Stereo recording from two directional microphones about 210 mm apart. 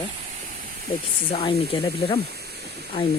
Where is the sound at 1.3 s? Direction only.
20° left (ahead or behind).